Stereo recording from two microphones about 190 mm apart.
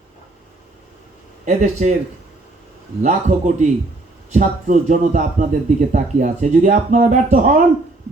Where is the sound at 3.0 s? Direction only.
40° right (ahead or behind).